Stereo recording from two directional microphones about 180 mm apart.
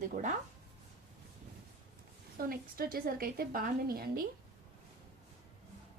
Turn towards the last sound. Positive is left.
turn(degrees=-55)  # may be behind; listen again after turning